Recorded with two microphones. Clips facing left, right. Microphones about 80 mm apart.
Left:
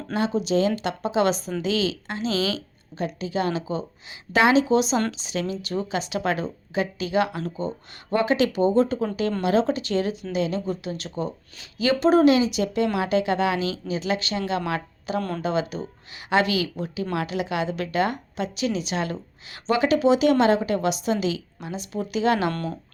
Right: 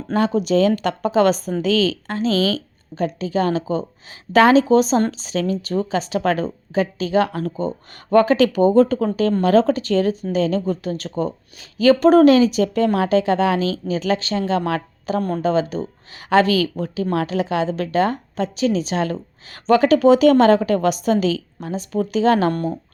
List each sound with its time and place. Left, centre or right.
0.1 s a woman's voice: right